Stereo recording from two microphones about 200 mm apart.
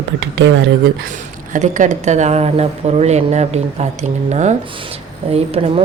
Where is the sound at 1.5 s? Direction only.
40° right (ahead or behind).